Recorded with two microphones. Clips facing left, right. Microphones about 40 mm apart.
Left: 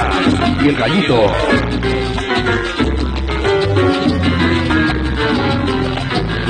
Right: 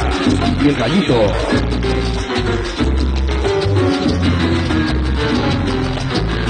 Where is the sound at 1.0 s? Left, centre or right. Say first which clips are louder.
Left 2 dB; left.